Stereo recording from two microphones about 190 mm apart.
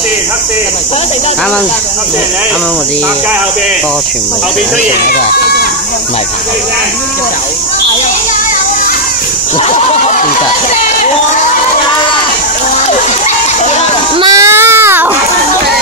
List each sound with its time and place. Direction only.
9.7 s speech: 35° left (ahead or behind)
14.2 s baby cry: 15° right (ahead or behind)